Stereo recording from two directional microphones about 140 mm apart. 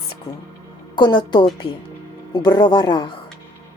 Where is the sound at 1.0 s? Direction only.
30° left (ahead or behind).